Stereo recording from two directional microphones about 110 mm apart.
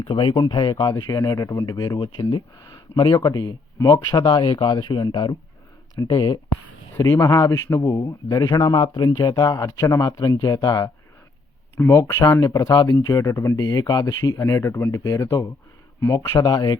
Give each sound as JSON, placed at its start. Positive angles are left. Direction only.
{"t": 0.0, "sound": "speech", "side_deg": 45}
{"t": 6.9, "sound": "speech", "side_deg": 25}
{"t": 11.8, "sound": "speech", "side_deg": 25}